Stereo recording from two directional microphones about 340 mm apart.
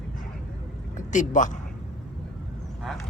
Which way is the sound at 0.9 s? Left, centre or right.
Left.